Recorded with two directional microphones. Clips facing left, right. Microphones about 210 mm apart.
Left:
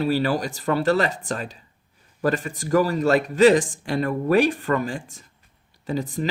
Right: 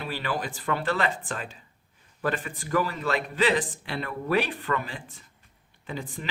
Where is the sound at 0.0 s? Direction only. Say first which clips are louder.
Left 9 dB; 40° left (ahead or behind).